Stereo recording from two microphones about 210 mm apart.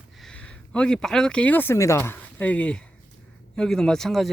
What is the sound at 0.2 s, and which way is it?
Speech, 5° left (ahead or behind).